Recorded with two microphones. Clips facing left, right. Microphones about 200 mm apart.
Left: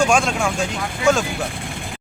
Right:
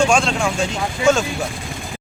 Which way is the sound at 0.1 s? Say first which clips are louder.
Right 1 dB; 5° left (ahead or behind).